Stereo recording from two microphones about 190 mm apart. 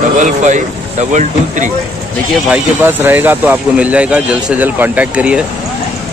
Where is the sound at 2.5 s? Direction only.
10° right (ahead or behind).